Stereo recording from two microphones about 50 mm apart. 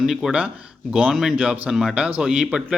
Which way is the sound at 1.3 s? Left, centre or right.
Right.